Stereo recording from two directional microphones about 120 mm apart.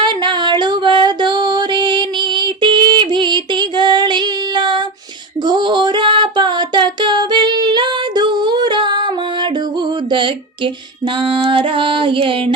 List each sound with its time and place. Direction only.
0.0 s music: 40° right (ahead or behind)
5.4 s female singing: 35° right (ahead or behind)